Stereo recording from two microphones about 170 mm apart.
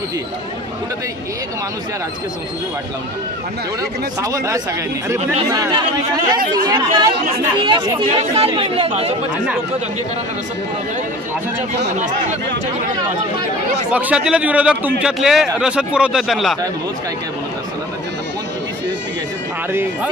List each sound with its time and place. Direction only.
4.2 s speech: 20° right (ahead or behind); by 9.1 s 35° right (ahead or behind)
13.9 s a man's voice: 5° right (ahead or behind)
19.7 s speech: 15° right (ahead or behind)